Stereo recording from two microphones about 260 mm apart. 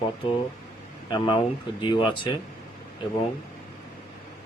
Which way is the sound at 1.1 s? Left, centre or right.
Centre.